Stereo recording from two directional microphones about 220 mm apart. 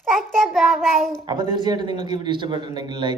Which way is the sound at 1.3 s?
20° right (ahead or behind).